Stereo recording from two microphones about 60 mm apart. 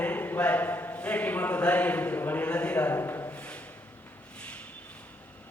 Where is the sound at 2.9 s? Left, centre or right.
Left.